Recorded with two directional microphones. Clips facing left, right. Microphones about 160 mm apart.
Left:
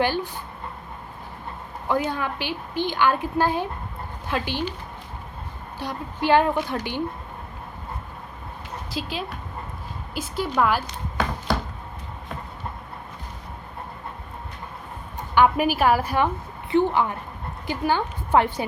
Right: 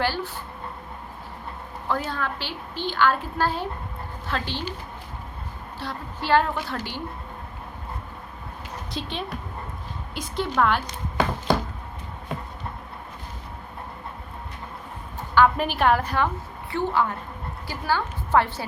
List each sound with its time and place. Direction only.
1.9 s a woman's voice: 15° left (ahead or behind)
5.8 s a woman's voice: 15° left (ahead or behind)
8.9 s a woman's voice: 5° left (ahead or behind)
15.4 s a woman's voice: 10° left (ahead or behind)